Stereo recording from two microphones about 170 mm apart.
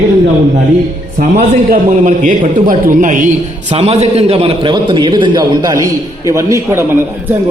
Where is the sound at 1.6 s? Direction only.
50° right (ahead or behind).